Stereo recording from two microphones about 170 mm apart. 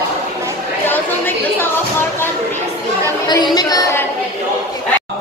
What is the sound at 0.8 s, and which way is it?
Chatter, 10° left (ahead or behind).